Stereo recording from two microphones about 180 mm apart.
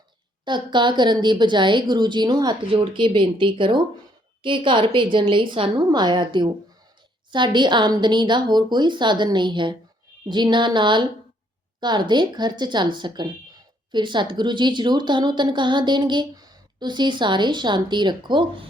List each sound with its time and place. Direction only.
0.4 s a woman's voice: 25° right (ahead or behind)